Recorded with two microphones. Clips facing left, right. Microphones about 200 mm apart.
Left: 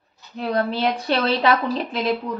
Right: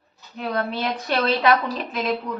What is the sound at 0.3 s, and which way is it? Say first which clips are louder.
Speech: left 3 dB; 30° left (ahead or behind).